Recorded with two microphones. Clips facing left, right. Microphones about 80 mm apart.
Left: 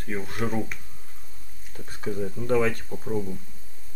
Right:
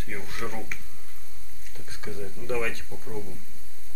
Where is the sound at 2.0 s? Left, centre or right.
Left.